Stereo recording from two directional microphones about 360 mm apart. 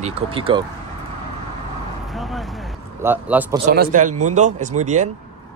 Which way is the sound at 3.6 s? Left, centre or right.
Right.